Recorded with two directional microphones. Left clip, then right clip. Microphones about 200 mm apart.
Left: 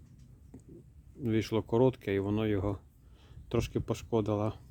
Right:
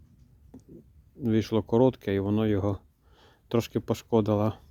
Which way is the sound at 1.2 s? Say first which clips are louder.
Right 5 dB; 30° right (ahead or behind).